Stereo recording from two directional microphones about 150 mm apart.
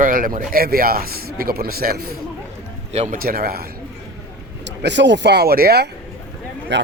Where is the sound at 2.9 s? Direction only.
60° right (ahead or behind); by 3.6 s 80° right.